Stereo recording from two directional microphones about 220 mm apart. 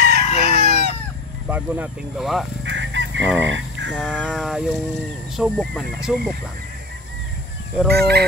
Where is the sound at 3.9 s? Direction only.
Centre (ahead or behind).